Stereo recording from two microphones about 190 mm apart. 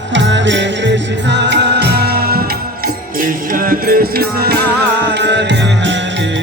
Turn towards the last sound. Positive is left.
turn(degrees=-70)  # may be behind; listen again after turning